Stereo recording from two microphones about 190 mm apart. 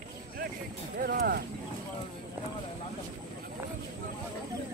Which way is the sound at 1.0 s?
55° right (ahead or behind).